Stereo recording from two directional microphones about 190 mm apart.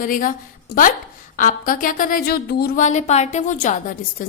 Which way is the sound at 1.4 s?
45° left (ahead or behind).